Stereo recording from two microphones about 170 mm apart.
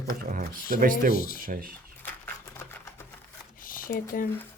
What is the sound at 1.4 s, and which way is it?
Speech, 55° right (ahead or behind).